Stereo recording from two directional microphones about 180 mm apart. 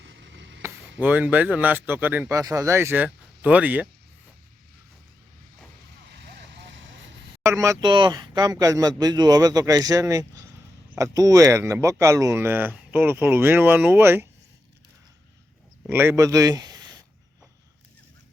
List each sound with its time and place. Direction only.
0.0 s a sound: 90° right
0.9 s speech: 10° right (ahead or behind)
6.1 s vehicle: 70° right (ahead or behind); by 6.9 s 85° right
7.4 s speech: 15° right (ahead or behind)
15.9 s speech: 15° right (ahead or behind)